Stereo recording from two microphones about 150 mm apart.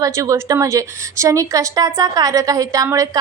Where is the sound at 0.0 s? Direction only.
20° right (ahead or behind).